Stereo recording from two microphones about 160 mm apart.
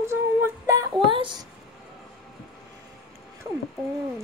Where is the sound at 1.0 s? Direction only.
30° right (ahead or behind).